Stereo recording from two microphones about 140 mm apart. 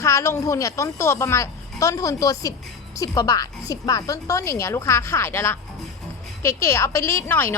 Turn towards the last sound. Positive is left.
turn(degrees=15)  # may be behind; listen again after turning